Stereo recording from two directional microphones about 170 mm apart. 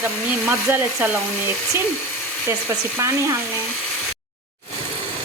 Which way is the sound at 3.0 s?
15° right (ahead or behind).